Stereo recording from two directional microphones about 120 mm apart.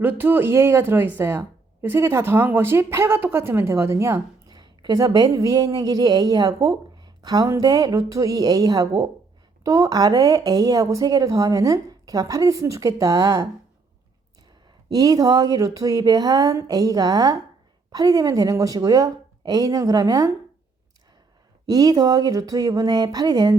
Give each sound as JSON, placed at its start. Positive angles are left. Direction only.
{"t": 0.0, "sound": "speech", "side_deg": -15}
{"t": 4.5, "sound": "speech", "side_deg": -35}
{"t": 14.8, "sound": "speech", "side_deg": -30}
{"t": 21.7, "sound": "speech", "side_deg": -35}